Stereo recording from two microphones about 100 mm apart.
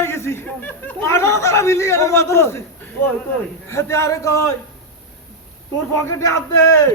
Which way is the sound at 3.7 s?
30° left (ahead or behind).